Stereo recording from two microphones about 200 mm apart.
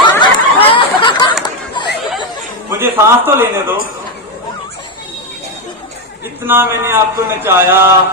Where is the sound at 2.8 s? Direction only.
10° right (ahead or behind).